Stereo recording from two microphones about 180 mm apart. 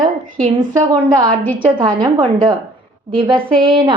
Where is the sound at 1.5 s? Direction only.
25° right (ahead or behind).